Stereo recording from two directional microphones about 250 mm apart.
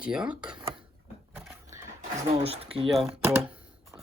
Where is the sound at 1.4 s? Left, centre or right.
Centre.